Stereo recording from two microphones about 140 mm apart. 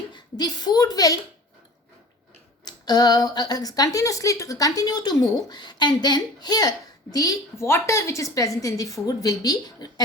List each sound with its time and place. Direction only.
0.1 s a woman's voice: 30° left (ahead or behind)
2.6 s speech: 30° left (ahead or behind)